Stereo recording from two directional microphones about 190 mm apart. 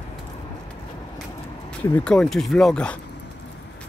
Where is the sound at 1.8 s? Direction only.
5° left (ahead or behind).